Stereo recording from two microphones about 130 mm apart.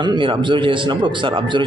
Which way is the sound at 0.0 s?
35° right (ahead or behind).